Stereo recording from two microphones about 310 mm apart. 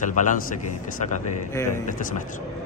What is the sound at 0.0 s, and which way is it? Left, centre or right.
Speech, left.